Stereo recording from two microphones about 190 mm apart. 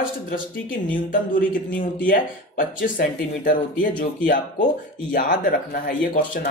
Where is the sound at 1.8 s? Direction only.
45° left (ahead or behind).